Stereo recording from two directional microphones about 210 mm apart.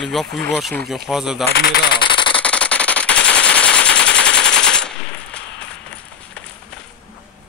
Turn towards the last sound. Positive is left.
turn(degrees=5)  # may be behind; listen again after turning